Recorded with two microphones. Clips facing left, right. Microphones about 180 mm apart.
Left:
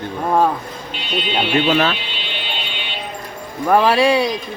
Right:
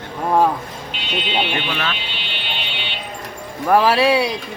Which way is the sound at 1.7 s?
35° left (ahead or behind).